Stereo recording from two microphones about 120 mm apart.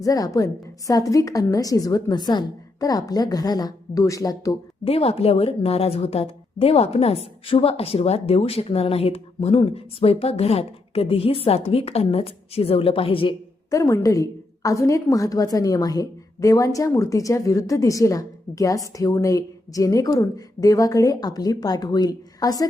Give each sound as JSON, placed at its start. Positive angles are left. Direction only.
{"t": 0.0, "sound": "a woman's voice", "side_deg": 30}
{"t": 4.9, "sound": "a woman's voice", "side_deg": 55}
{"t": 13.7, "sound": "a woman's voice", "side_deg": 25}